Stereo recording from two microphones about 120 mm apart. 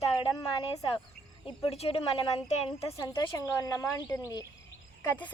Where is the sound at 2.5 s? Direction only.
65° left (ahead or behind).